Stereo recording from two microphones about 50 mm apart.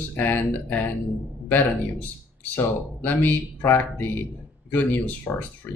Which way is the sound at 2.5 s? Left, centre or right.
Left.